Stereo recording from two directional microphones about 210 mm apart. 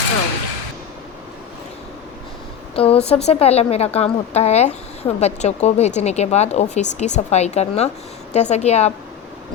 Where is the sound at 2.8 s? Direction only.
25° left (ahead or behind).